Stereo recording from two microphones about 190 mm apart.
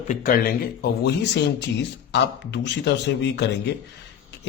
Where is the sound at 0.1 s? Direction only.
50° left (ahead or behind).